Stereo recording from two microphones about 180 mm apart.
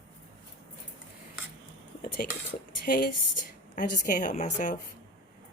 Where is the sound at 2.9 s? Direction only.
50° left (ahead or behind).